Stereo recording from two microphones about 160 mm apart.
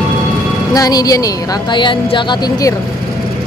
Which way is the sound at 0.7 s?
25° left (ahead or behind).